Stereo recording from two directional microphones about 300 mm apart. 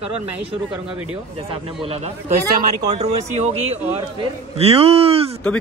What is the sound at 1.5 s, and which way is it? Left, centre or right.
A man's voice, centre.